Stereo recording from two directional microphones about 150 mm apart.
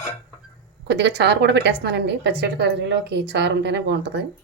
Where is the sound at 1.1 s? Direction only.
90° right.